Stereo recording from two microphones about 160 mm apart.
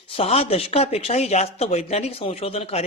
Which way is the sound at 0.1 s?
40° left (ahead or behind).